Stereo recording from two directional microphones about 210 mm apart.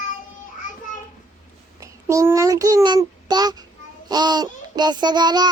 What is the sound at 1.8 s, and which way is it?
Child singing, 15° right (ahead or behind).